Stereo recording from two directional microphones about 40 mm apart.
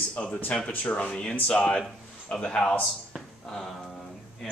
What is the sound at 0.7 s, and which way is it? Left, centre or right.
Speech, left.